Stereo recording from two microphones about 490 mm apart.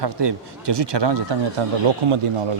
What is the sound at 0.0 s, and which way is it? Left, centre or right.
Speech, right.